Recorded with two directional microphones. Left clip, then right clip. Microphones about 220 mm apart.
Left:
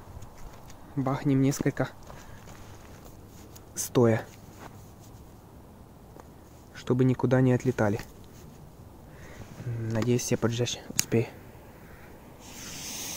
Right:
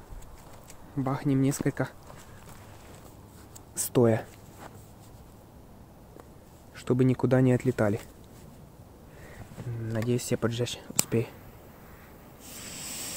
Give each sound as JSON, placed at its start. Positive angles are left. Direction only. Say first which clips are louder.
{"t": 0.9, "sound": "speech", "louder": "left 1 dB", "side_deg": -5}
{"t": 3.7, "sound": "speech", "louder": "even", "side_deg": 0}
{"t": 6.7, "sound": "speech", "louder": "even", "side_deg": -5}
{"t": 9.8, "sound": "speech", "louder": "left 2 dB", "side_deg": 5}
{"t": 12.4, "sound": "a sound", "louder": "left 1 dB", "side_deg": -15}